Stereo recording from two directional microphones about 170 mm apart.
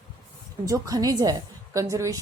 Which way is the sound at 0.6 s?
20° right (ahead or behind).